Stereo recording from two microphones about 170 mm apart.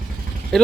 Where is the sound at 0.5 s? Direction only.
Centre (ahead or behind).